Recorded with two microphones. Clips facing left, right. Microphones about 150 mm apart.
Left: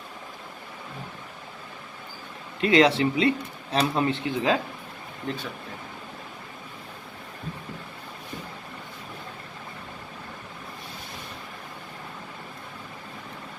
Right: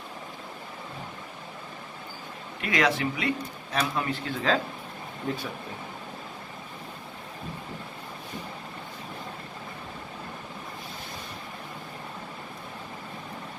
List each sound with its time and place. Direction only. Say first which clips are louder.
2.6 s speech: left 7 dB; 30° left (ahead or behind)